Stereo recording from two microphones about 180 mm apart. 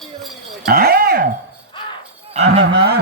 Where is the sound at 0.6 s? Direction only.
60° right (ahead or behind).